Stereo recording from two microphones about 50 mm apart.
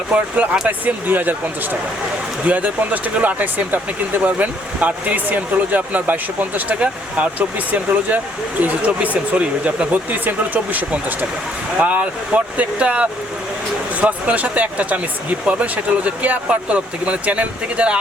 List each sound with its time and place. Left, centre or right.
0.1 s speech: right
0.9 s speech: right
2.5 s speech: right
6.7 s speech: right